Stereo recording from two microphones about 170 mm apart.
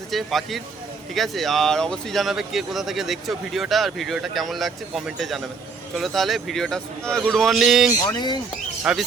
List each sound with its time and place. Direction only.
0.1 s speech: centre (ahead or behind)
8.0 s speech: 25° left (ahead or behind)
8.8 s speech: 5° right (ahead or behind)